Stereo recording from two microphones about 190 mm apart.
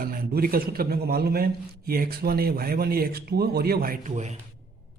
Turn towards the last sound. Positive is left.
turn(degrees=-40)  # may be behind; listen again after turning